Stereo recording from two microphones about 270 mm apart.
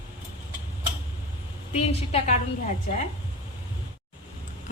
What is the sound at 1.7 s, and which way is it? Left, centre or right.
Speech, left.